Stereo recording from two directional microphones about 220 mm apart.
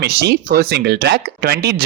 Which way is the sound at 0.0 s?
45° right (ahead or behind).